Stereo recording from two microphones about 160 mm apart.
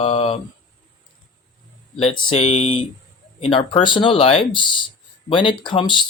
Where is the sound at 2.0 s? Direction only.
40° left (ahead or behind).